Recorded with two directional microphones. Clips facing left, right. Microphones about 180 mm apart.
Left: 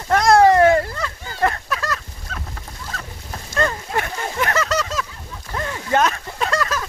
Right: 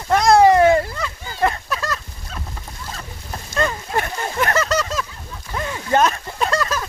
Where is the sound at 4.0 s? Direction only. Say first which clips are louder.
Right 2 dB; 40° right (ahead or behind).